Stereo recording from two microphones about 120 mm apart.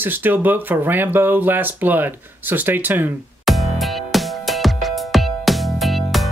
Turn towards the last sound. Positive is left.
turn(degrees=0)  # may be behind; listen again after turning